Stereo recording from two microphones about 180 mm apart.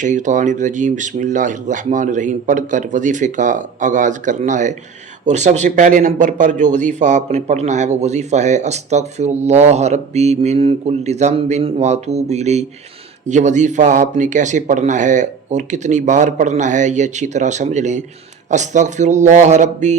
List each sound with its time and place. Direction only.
0.0 s speech: 45° right (ahead or behind)